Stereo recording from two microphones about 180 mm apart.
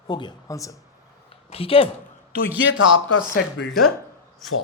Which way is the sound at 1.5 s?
30° left (ahead or behind).